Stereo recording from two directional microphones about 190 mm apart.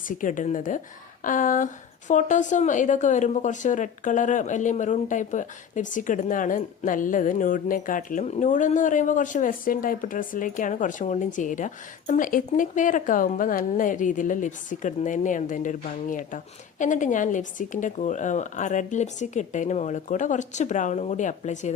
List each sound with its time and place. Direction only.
0.2 s a woman's voice: 45° left (ahead or behind)